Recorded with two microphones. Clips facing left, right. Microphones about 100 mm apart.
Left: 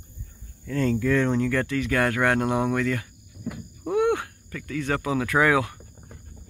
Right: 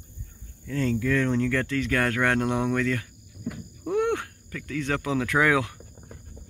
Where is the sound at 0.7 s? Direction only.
45° left (ahead or behind).